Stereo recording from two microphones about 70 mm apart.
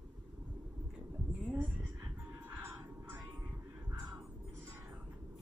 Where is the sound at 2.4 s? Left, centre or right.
Right.